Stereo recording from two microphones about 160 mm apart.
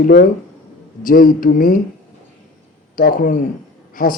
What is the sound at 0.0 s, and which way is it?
A man's voice, 60° left (ahead or behind).